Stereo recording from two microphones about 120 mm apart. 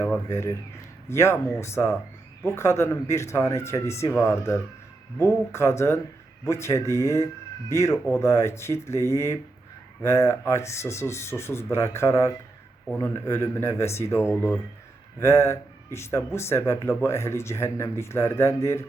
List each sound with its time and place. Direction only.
0.3 s speech: 25° left (ahead or behind)